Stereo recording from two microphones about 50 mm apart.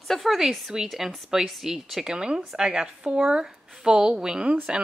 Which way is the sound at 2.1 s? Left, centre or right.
Centre.